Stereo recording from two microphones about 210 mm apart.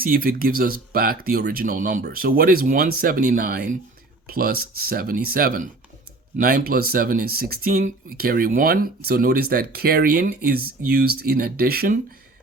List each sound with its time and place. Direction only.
0.0 s speech: 45° right (ahead or behind)